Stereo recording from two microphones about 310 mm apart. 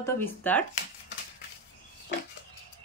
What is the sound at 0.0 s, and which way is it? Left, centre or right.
Speech, centre.